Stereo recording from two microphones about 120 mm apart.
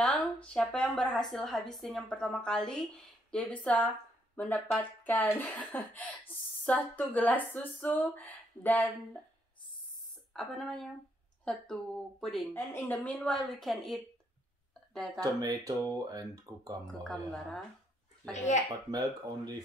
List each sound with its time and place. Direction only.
0.0 s speech: 10° left (ahead or behind)
10.3 s speech: 5° left (ahead or behind)
12.5 s speech: 15° left (ahead or behind); by 14.0 s centre (ahead or behind)
15.1 s speech: 30° right (ahead or behind)
16.8 s speech: 5° left (ahead or behind)
18.3 s speech: 90° left
18.9 s speech: 35° right (ahead or behind)